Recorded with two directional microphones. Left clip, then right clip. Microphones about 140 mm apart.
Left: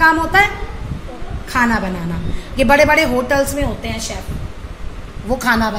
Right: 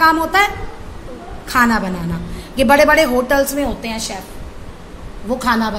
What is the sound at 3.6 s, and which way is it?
Speech, 25° right (ahead or behind).